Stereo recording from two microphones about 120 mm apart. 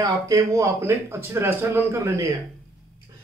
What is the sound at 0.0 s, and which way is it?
Speech, 25° right (ahead or behind).